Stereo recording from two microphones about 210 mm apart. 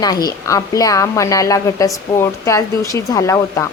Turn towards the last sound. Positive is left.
turn(degrees=15)  # may be behind; listen again after turning